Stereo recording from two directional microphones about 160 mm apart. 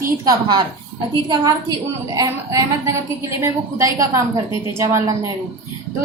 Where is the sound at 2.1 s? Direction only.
20° right (ahead or behind).